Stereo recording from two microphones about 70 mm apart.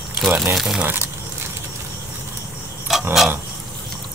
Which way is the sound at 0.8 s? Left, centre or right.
Right.